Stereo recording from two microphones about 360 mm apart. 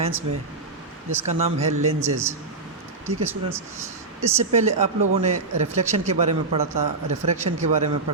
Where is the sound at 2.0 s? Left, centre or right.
Centre.